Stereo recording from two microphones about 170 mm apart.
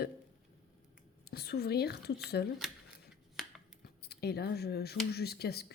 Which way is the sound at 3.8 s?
70° left (ahead or behind).